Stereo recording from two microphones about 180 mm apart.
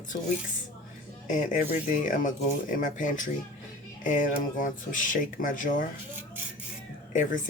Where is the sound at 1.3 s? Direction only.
45° left (ahead or behind).